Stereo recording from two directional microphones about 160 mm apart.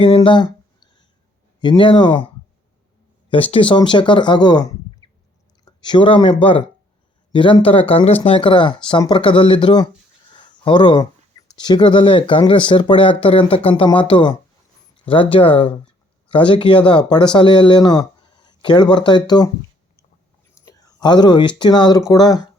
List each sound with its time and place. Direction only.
0.0 s a sound: 35° left (ahead or behind)
1.6 s speech: 30° left (ahead or behind)
3.5 s speech: 30° left (ahead or behind)
5.0 s a sound: 30° left (ahead or behind)
5.6 s speech: 30° left (ahead or behind)
20.6 s speech: 20° left (ahead or behind)